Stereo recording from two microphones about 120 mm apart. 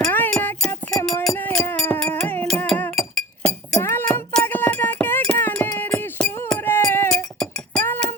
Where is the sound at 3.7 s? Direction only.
20° left (ahead or behind).